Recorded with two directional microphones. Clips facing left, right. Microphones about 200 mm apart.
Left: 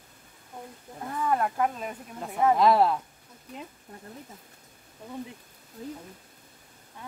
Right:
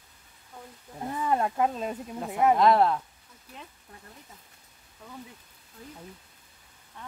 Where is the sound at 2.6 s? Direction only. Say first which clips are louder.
Left 1 dB; centre (ahead or behind).